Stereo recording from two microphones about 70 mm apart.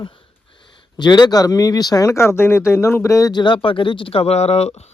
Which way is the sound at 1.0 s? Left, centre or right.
Left.